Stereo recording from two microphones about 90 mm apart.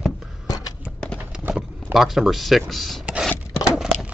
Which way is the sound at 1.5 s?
5° right (ahead or behind).